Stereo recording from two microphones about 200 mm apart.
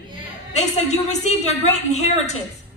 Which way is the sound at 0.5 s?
35° left (ahead or behind).